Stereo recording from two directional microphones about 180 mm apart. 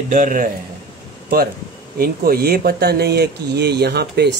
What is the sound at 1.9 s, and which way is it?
Speech, 55° right (ahead or behind).